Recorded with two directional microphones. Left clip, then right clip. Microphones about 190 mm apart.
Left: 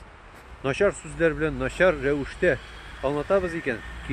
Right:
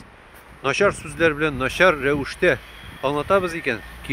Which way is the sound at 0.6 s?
25° right (ahead or behind).